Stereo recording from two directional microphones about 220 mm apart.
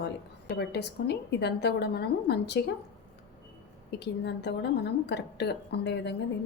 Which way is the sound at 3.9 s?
50° left (ahead or behind).